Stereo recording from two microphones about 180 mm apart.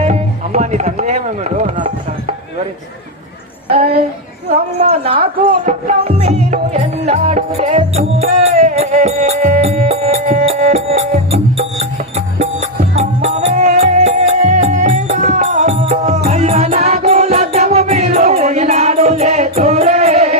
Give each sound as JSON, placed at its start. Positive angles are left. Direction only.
{"t": 0.0, "sound": "music", "side_deg": -40}
{"t": 3.8, "sound": "music", "side_deg": -40}